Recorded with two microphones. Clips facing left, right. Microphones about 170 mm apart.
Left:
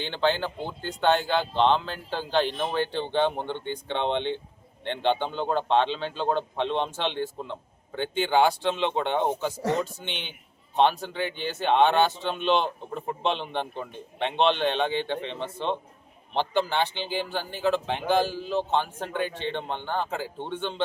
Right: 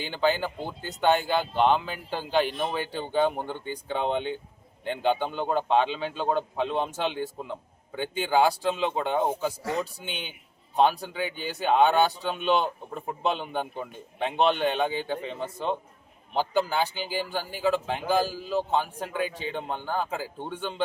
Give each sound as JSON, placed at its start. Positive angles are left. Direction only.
{"t": 0.0, "sound": "a man's voice", "side_deg": -5}
{"t": 9.6, "sound": "speech", "side_deg": 40}
{"t": 9.8, "sound": "a man's voice", "side_deg": -10}